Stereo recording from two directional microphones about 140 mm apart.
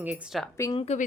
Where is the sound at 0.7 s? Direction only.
50° left (ahead or behind).